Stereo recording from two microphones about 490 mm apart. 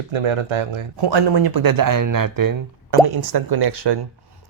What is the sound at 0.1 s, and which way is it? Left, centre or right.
Speech, right.